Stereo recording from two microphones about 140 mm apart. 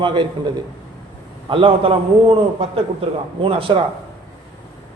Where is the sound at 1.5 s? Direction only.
40° right (ahead or behind).